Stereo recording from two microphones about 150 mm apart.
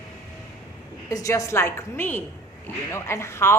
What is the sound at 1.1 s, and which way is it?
A woman's voice, 20° left (ahead or behind).